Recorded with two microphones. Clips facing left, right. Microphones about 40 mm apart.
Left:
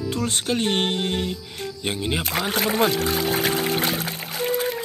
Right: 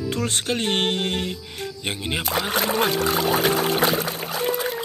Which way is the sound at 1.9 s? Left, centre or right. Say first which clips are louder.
Left 2 dB; right.